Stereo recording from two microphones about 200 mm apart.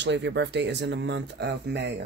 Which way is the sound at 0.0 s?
60° right (ahead or behind).